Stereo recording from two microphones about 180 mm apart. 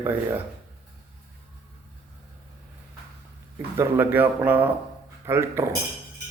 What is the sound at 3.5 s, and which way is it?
Speech, 15° right (ahead or behind).